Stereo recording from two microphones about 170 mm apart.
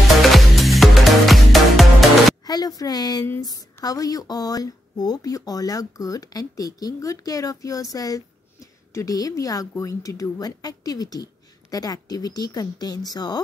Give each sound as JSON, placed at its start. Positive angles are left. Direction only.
{"t": 0.2, "sound": "music", "side_deg": 0}
{"t": 2.4, "sound": "speech", "side_deg": 20}